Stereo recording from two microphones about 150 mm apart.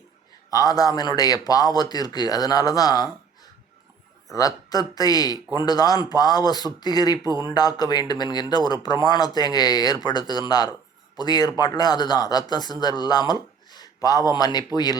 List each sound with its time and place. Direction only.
0.5 s speech: 25° left (ahead or behind)
4.3 s speech: 25° left (ahead or behind)